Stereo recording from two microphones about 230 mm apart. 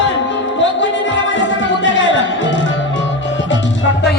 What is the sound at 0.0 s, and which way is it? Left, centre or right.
Music, left.